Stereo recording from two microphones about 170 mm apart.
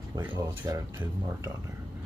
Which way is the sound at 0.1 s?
25° right (ahead or behind).